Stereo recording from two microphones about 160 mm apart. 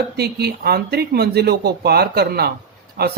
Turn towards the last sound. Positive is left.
turn(degrees=-75)  # may be behind; listen again after turning